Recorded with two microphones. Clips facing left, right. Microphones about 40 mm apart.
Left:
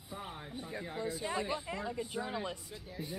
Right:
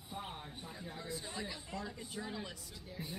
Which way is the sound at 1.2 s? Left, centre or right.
Left.